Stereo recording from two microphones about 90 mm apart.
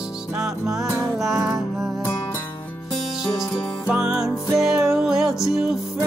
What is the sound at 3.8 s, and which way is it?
Music, 10° right (ahead or behind).